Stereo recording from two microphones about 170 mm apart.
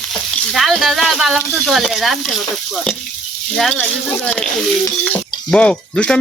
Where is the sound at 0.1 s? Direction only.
Centre (ahead or behind).